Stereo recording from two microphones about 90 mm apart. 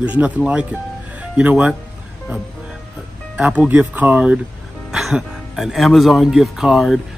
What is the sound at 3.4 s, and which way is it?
Speech, 15° right (ahead or behind).